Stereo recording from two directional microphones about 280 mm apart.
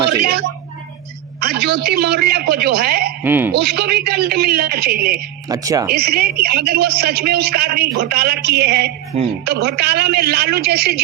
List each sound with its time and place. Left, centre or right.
0.1 s a man's voice: right
3.2 s speech: centre
3.5 s a man's voice: right
5.5 s speech: centre
5.9 s a man's voice: right